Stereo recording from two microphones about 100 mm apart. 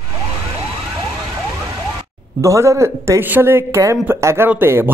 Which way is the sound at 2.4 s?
30° right (ahead or behind).